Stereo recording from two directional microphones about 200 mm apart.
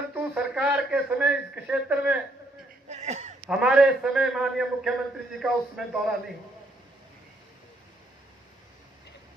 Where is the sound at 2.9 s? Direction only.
35° right (ahead or behind).